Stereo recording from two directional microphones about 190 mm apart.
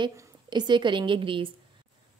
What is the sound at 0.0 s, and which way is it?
A woman's voice, 25° right (ahead or behind).